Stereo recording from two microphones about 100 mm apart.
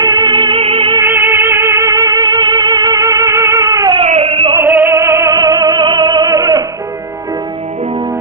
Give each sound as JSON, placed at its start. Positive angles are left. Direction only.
{"t": 0.0, "sound": "music", "side_deg": -55}
{"t": 1.0, "sound": "music", "side_deg": -25}
{"t": 2.2, "sound": "music", "side_deg": -50}
{"t": 3.0, "sound": "music", "side_deg": -30}
{"t": 4.0, "sound": "a sound", "side_deg": -90}
{"t": 4.5, "sound": "music", "side_deg": -20}
{"t": 5.3, "sound": "music", "side_deg": -40}